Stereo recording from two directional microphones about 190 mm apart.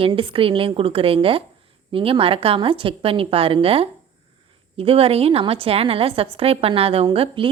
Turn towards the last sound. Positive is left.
turn(degrees=-30)  # may be behind; listen again after turning